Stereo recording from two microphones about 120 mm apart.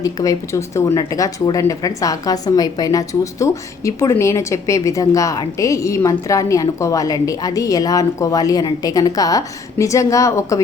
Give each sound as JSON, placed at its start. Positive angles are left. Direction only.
{"t": 0.0, "sound": "speech", "side_deg": 30}